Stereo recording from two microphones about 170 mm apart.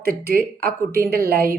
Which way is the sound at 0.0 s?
60° right (ahead or behind).